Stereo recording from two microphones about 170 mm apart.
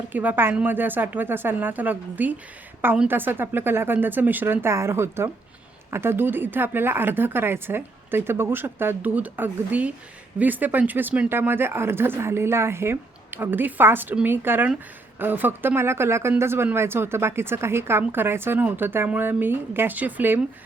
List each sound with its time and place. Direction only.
0.1 s speech: 10° right (ahead or behind)